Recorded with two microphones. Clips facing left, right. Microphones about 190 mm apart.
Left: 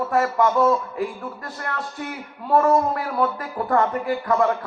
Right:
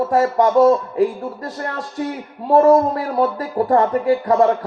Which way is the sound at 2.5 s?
30° right (ahead or behind).